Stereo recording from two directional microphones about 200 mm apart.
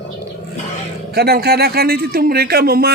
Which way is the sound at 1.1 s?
50° right (ahead or behind).